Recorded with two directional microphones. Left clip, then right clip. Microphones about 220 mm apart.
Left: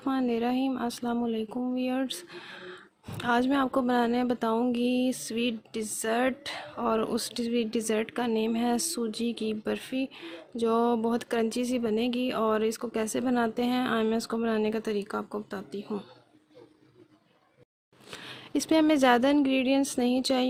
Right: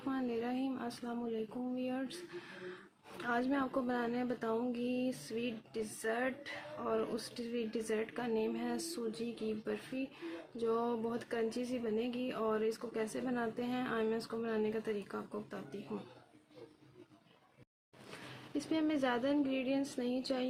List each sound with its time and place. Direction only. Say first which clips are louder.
0.0 s speech: left 10 dB; 45° left (ahead or behind)
3.2 s speech: left 10 dB; 45° left (ahead or behind)
18.5 s speech: left 12 dB; 50° left (ahead or behind)